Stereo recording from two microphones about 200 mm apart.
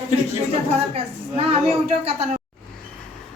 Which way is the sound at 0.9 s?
30° right (ahead or behind).